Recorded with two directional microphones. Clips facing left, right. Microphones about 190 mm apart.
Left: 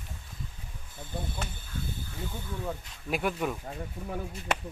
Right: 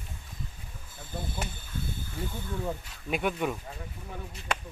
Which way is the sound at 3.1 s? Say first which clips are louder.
Right 1 dB; centre (ahead or behind).